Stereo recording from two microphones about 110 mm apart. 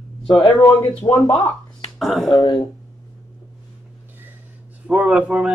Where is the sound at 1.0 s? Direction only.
20° left (ahead or behind).